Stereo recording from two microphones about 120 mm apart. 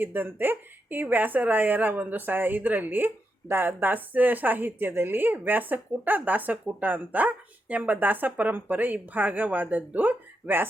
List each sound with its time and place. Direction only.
0.0 s a woman's voice: 15° right (ahead or behind)